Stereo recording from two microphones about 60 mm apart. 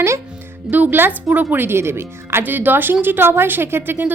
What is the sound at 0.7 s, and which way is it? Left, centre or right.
Speech, right.